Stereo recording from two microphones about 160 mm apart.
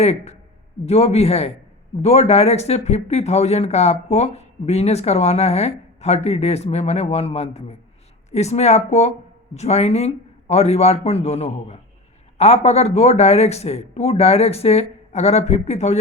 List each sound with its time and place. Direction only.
0.0 s speech: 40° left (ahead or behind)